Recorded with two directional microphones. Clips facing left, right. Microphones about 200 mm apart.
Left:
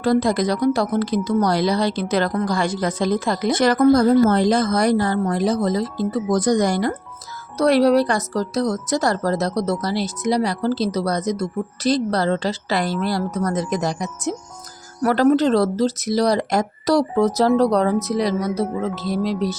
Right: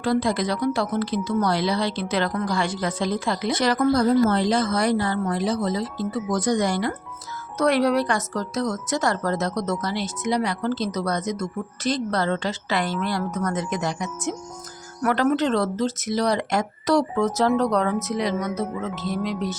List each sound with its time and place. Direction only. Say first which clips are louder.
0.0 s speech: left 4 dB; 40° left (ahead or behind)